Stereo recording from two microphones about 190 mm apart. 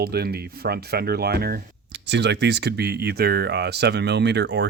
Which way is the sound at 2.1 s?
65° right (ahead or behind).